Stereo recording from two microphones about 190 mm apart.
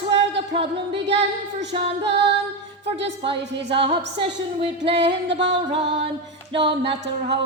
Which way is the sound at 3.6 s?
25° right (ahead or behind).